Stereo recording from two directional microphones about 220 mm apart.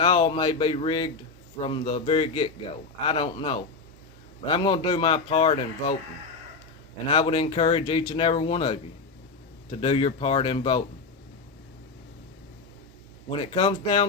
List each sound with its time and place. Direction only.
0.0 s speech: 25° left (ahead or behind)
7.1 s speech: 25° left (ahead or behind)
13.4 s speech: 25° left (ahead or behind)